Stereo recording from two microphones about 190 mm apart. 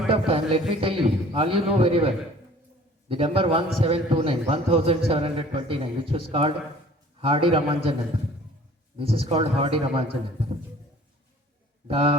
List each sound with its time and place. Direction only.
0.1 s a man's voice: 30° right (ahead or behind)
9.0 s a man's voice: 30° right (ahead or behind)
11.9 s a man's voice: 30° right (ahead or behind)